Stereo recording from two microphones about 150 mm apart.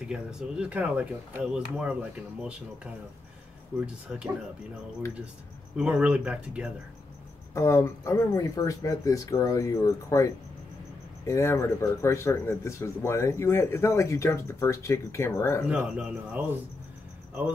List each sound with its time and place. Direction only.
0.1 s speech: 5° right (ahead or behind)
5.8 s speech: 5° right (ahead or behind)
7.5 s speech: 20° left (ahead or behind)
15.7 s speech: 5° right (ahead or behind)